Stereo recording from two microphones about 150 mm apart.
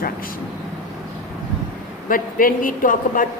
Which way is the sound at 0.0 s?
70° left (ahead or behind).